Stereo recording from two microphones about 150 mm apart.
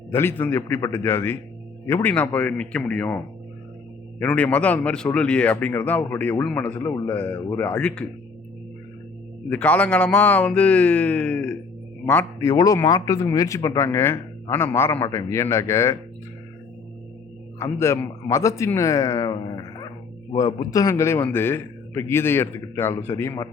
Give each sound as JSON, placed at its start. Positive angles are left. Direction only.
{"t": 0.1, "sound": "a man's voice", "side_deg": 15}
{"t": 4.2, "sound": "a man's voice", "side_deg": 10}
{"t": 9.5, "sound": "a man's voice", "side_deg": 10}
{"t": 17.6, "sound": "a man's voice", "side_deg": 15}